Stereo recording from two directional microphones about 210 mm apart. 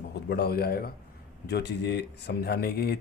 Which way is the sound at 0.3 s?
50° left (ahead or behind).